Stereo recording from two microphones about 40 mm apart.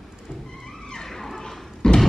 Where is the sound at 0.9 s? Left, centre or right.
Centre.